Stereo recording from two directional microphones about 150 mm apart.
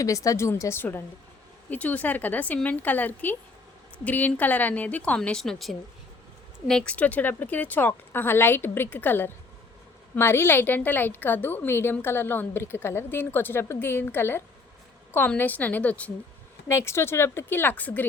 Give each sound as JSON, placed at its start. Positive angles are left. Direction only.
{"t": 0.0, "sound": "a woman's voice", "side_deg": 20}